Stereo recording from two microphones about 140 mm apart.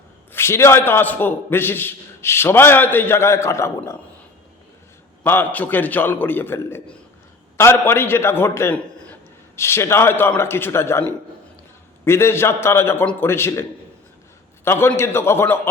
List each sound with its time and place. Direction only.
0.3 s a man's voice: 20° left (ahead or behind)
5.2 s a man's voice: 15° left (ahead or behind)